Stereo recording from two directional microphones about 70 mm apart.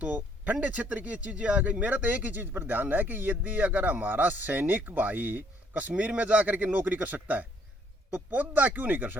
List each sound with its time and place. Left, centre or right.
0.0 s speech: right